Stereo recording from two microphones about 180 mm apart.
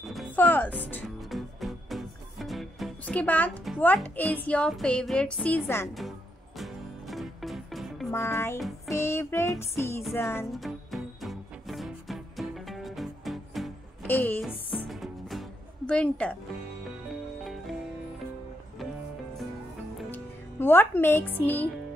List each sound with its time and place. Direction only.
0.0 s speech: centre (ahead or behind)
1.0 s music: centre (ahead or behind)
6.6 s music: centre (ahead or behind)
8.1 s music: 15° left (ahead or behind)
8.5 s music: centre (ahead or behind)
8.9 s music: 15° left (ahead or behind)
10.5 s music: centre (ahead or behind)
14.0 s a woman's voice: 10° left (ahead or behind)
14.4 s music: centre (ahead or behind)
17.4 s music: centre (ahead or behind)
20.1 s speech: 10° left (ahead or behind)